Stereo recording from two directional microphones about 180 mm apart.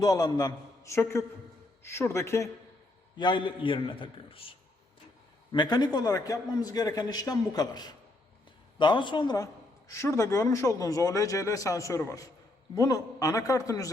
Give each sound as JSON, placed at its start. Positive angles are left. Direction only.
{"t": 0.0, "sound": "a man's voice", "side_deg": 20}